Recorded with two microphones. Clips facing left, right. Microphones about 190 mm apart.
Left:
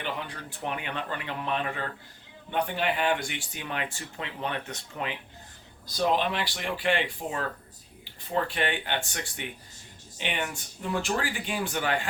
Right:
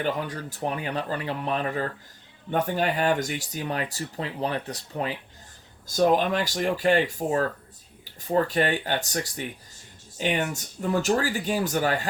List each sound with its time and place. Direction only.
0.0 s speech: 40° right (ahead or behind)
5.9 s speech: 45° right (ahead or behind)